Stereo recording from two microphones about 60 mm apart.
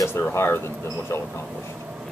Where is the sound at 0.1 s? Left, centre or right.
Left.